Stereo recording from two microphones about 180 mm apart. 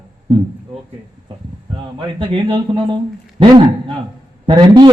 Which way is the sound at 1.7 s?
25° right (ahead or behind).